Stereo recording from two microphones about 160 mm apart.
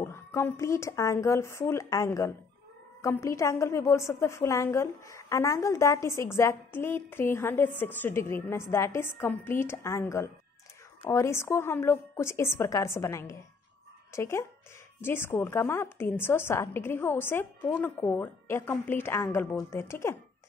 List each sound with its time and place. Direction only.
0.0 s a woman's voice: 15° left (ahead or behind)